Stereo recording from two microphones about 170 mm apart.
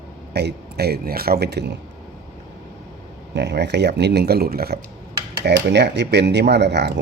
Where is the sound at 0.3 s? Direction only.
70° right (ahead or behind).